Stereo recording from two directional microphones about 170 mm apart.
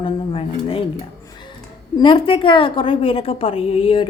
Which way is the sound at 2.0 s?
30° left (ahead or behind).